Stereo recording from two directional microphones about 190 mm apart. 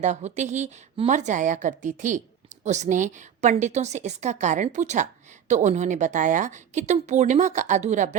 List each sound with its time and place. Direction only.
0.0 s speech: 40° right (ahead or behind)